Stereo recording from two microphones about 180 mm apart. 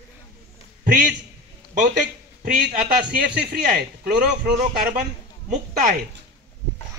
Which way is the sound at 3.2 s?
65° right (ahead or behind).